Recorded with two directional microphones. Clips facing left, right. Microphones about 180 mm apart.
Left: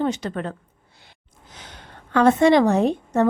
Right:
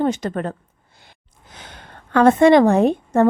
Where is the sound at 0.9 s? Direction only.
50° right (ahead or behind).